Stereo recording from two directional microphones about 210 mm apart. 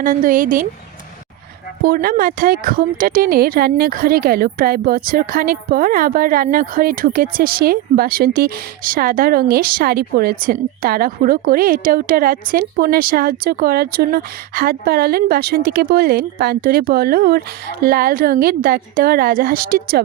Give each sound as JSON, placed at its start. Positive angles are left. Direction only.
{"t": 0.0, "sound": "speech", "side_deg": -40}
{"t": 1.8, "sound": "speech", "side_deg": -45}